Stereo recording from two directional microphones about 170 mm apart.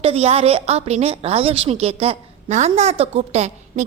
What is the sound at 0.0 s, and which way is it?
A woman's voice, 35° right (ahead or behind).